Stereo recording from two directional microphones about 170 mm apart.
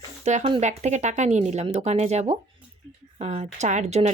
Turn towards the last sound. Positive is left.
turn(degrees=-45)  # may be behind; listen again after turning